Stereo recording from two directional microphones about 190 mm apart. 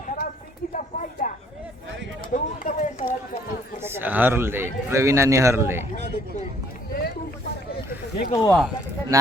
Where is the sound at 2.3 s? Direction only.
40° left (ahead or behind).